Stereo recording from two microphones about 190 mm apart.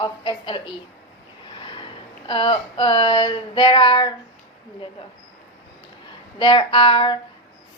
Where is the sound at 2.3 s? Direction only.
25° left (ahead or behind).